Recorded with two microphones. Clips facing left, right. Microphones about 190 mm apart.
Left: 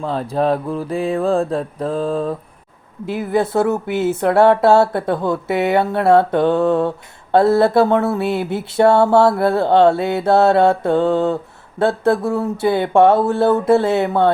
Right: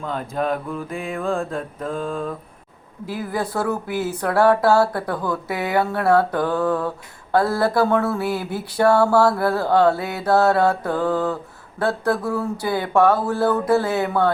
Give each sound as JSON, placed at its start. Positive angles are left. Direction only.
{"t": 0.0, "sound": "mantra", "side_deg": 35}
{"t": 3.1, "sound": "speech", "side_deg": 25}